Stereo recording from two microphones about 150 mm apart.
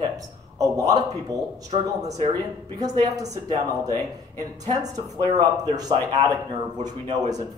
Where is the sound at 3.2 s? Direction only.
25° right (ahead or behind).